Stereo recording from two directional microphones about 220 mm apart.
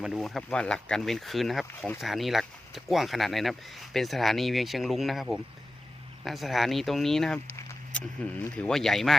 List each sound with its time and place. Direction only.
0.0 s speech: centre (ahead or behind)